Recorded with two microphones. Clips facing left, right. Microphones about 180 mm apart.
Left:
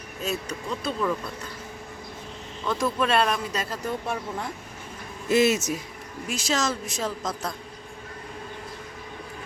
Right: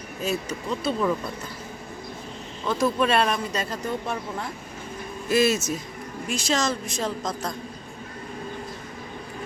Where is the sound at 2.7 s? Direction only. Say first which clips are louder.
Right 2 dB; centre (ahead or behind).